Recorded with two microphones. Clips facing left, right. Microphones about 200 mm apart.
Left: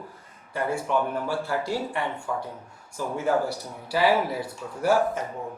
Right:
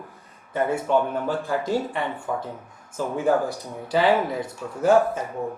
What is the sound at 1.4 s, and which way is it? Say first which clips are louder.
Speech: right 3 dB; 15° right (ahead or behind).